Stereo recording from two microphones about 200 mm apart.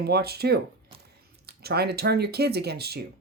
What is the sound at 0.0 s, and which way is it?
Speech, 50° right (ahead or behind).